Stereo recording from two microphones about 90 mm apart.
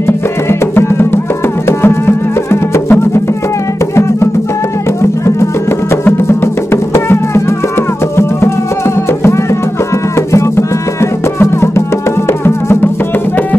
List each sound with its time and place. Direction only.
0.0 s music: 30° left (ahead or behind)
5.2 s music: 30° left (ahead or behind)